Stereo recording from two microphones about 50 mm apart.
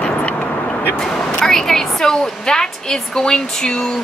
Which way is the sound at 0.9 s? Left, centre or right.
Centre.